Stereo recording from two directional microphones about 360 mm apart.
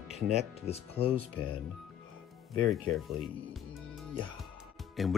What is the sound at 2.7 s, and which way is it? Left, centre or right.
Speech, centre.